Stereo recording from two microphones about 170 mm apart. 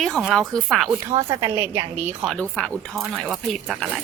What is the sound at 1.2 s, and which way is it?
A woman's voice, 15° right (ahead or behind).